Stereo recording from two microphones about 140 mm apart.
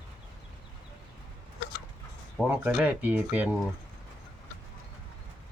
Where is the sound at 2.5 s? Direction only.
10° right (ahead or behind).